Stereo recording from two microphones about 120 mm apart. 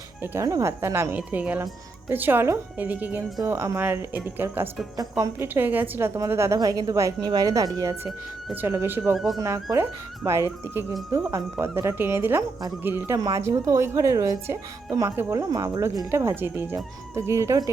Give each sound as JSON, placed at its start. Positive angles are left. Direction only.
{"t": 0.2, "sound": "speech", "side_deg": -25}
{"t": 1.1, "sound": "speech", "side_deg": -10}
{"t": 9.1, "sound": "speech", "side_deg": 0}
{"t": 9.4, "sound": "speech", "side_deg": -25}
{"t": 13.1, "sound": "speech", "side_deg": -30}
{"t": 15.3, "sound": "speech", "side_deg": -30}